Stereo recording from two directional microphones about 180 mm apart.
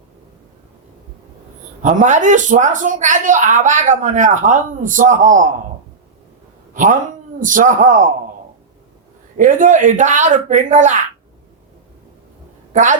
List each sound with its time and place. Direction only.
1.8 s speech: 45° right (ahead or behind)
6.7 s a man's voice: 45° right (ahead or behind)
9.4 s speech: 45° right (ahead or behind)
12.7 s a woman's voice: 45° right (ahead or behind)